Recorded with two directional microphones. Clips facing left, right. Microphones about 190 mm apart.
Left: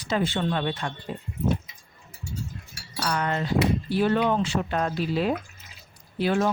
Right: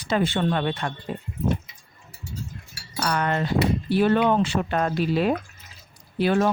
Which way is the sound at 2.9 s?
55° right (ahead or behind).